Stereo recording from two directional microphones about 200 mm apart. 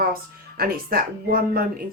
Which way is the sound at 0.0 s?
50° right (ahead or behind).